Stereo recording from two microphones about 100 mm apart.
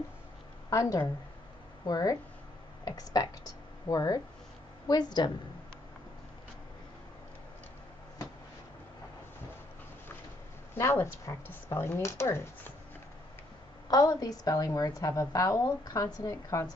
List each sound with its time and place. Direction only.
0.7 s a woman's voice: 30° left (ahead or behind)
10.7 s speech: 25° left (ahead or behind)
13.8 s a woman's voice: 40° left (ahead or behind)